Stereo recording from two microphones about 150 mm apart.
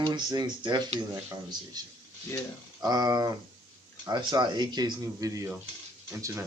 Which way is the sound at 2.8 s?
25° right (ahead or behind).